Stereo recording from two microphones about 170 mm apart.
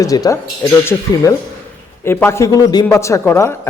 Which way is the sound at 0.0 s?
20° left (ahead or behind).